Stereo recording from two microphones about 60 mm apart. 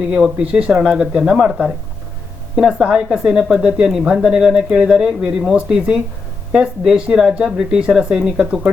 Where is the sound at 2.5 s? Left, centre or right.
Centre.